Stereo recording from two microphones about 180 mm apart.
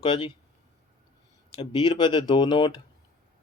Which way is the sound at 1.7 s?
25° left (ahead or behind).